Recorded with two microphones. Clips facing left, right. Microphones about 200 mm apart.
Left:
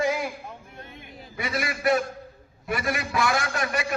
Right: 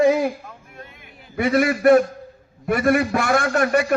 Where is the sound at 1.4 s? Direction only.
55° right (ahead or behind).